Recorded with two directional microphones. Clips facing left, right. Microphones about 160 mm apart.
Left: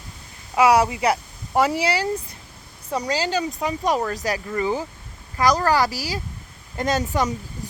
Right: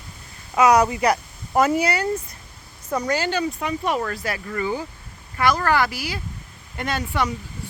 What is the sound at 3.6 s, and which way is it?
Speech, 35° left (ahead or behind).